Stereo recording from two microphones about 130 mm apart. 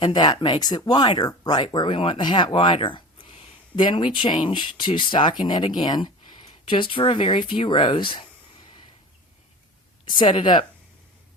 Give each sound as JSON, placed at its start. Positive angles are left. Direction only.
{"t": 0.0, "sound": "speech", "side_deg": 35}
{"t": 10.1, "sound": "speech", "side_deg": 40}